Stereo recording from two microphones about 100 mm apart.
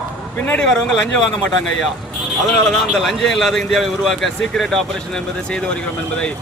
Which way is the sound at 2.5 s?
5° left (ahead or behind).